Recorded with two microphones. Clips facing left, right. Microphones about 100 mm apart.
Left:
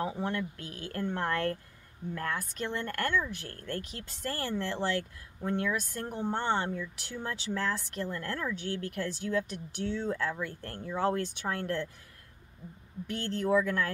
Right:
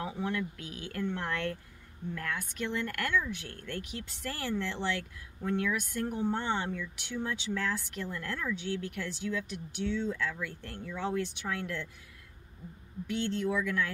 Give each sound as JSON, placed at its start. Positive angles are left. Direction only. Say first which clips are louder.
{"t": 0.0, "sound": "speech", "louder": "left 1 dB", "side_deg": 35}
{"t": 13.1, "sound": "speech", "louder": "left 3 dB", "side_deg": 40}